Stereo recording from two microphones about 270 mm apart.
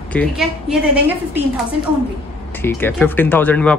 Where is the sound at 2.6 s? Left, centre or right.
Centre.